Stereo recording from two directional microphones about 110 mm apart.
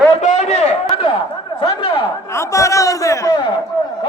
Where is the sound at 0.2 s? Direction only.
90° left.